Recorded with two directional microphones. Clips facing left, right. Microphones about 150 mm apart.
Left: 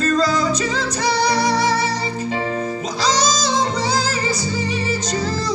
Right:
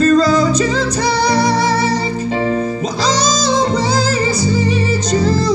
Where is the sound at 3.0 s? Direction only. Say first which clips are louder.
Right 2 dB; 25° right (ahead or behind).